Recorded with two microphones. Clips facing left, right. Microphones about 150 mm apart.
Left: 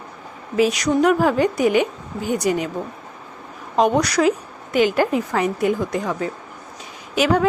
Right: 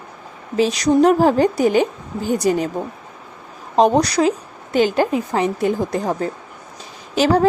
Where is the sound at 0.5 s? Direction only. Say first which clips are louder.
Right 2 dB; 30° right (ahead or behind).